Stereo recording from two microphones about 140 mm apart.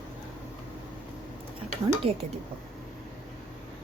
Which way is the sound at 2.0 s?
40° right (ahead or behind).